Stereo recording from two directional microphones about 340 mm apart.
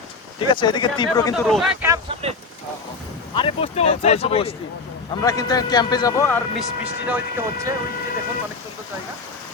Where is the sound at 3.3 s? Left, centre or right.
Centre.